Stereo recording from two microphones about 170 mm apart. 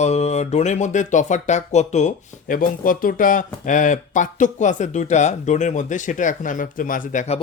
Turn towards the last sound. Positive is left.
turn(degrees=45)  # may be behind; listen again after turning